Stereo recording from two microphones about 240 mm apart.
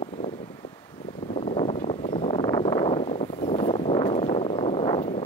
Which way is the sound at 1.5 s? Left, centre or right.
Left.